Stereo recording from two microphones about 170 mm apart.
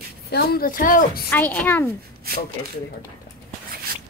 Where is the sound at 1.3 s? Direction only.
10° left (ahead or behind).